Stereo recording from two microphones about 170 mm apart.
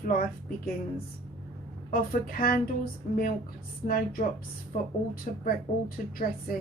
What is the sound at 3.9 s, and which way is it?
Speech, 60° left (ahead or behind).